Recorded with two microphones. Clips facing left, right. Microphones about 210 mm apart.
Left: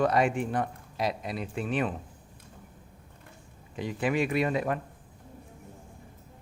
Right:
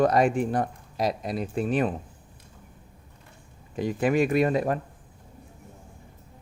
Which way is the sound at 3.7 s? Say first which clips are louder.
Right 5 dB; 45° right (ahead or behind).